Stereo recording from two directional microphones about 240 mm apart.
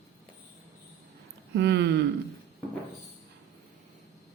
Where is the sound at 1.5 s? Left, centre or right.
Right.